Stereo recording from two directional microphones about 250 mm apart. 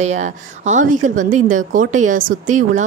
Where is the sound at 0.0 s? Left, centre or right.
Right.